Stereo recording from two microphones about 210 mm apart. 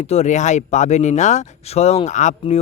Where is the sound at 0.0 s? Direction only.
30° left (ahead or behind).